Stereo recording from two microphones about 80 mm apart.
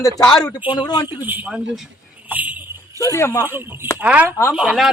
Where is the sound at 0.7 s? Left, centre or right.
Left.